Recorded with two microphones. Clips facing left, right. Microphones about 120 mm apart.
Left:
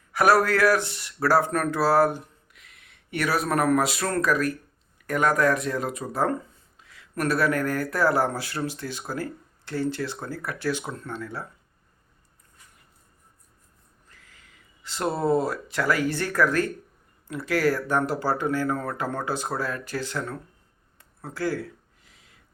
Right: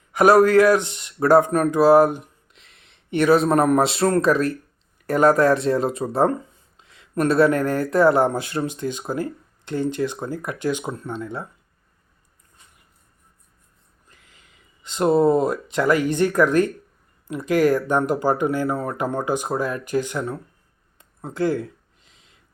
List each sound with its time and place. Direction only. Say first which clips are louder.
0.1 s speech: right 6 dB; 20° right (ahead or behind)
14.1 s speech: right 1 dB; 20° right (ahead or behind)
21.0 s a sound: right 6 dB; 20° right (ahead or behind)